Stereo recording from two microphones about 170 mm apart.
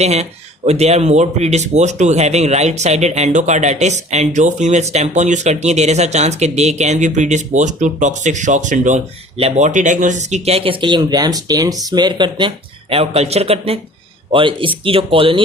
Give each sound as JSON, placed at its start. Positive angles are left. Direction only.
{"t": 0.0, "sound": "speech", "side_deg": -40}